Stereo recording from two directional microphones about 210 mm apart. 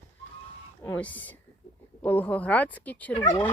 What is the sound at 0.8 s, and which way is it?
Speech, 10° left (ahead or behind).